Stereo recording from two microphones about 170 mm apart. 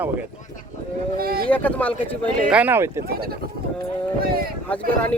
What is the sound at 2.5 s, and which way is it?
Speech, 10° right (ahead or behind).